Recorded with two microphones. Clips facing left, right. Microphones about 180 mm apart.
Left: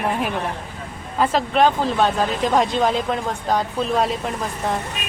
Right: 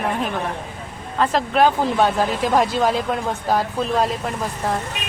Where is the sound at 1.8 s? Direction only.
15° right (ahead or behind).